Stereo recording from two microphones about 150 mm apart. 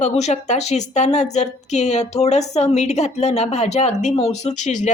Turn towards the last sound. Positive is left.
turn(degrees=50)  # may be behind; listen again after turning